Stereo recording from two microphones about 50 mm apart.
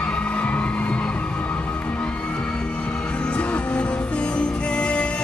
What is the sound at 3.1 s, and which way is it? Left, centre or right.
Music, left.